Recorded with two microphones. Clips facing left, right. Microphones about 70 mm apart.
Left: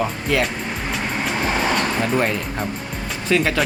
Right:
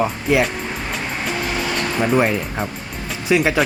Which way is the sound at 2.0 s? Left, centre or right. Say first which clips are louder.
Right 3 dB; centre.